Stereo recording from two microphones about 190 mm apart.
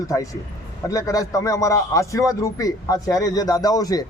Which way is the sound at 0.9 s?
20° left (ahead or behind).